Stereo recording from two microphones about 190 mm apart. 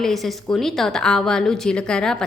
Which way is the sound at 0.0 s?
Centre (ahead or behind).